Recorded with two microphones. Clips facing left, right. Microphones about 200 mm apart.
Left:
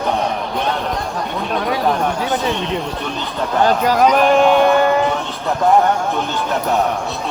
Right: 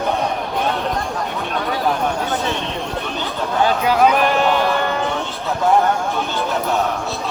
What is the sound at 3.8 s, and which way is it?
Speech, 5° right (ahead or behind).